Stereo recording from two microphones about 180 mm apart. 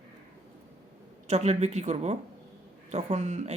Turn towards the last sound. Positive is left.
turn(degrees=-40)  # may be behind; listen again after turning